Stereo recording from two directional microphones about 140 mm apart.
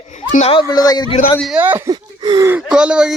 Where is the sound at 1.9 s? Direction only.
25° right (ahead or behind).